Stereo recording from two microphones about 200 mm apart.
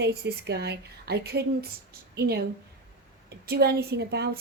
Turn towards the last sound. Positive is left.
turn(degrees=-55)  # may be behind; listen again after turning